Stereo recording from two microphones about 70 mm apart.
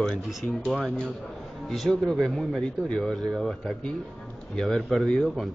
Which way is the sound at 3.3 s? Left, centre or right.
Centre.